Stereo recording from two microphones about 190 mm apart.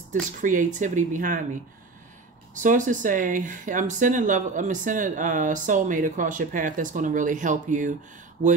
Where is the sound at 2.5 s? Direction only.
40° right (ahead or behind).